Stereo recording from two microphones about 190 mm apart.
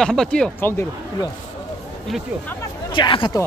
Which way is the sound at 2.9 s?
25° left (ahead or behind).